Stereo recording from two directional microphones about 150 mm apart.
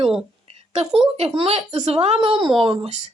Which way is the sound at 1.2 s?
40° right (ahead or behind).